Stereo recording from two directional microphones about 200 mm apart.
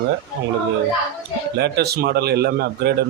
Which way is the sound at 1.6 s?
55° right (ahead or behind).